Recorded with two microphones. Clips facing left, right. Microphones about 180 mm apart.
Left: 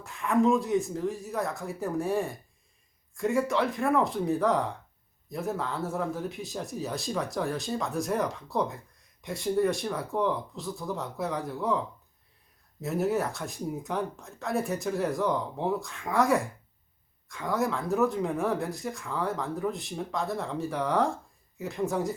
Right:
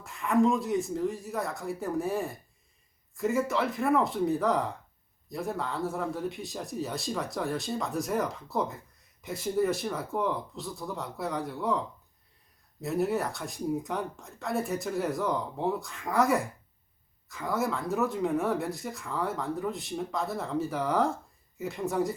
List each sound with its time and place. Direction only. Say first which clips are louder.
0.0 s speech: even; centre (ahead or behind)
12.8 s speech: left 1 dB; centre (ahead or behind)